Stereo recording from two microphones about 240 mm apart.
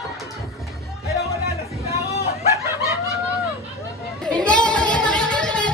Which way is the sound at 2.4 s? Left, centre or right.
Centre.